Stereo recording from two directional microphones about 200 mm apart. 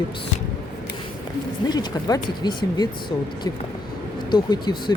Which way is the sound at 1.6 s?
20° left (ahead or behind).